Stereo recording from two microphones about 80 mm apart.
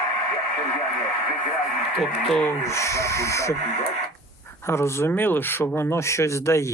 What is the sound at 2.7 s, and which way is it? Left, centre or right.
Speech, left.